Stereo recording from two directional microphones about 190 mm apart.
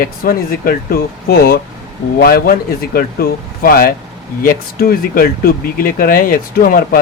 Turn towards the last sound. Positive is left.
turn(degrees=50)  # may be behind; listen again after turning